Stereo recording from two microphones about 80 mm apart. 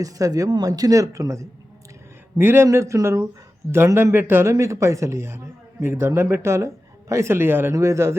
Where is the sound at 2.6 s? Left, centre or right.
Right.